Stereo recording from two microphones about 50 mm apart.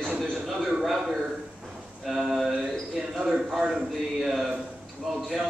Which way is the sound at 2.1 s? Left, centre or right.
Centre.